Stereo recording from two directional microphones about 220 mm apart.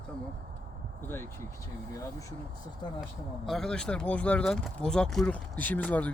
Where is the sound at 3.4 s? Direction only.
Centre (ahead or behind).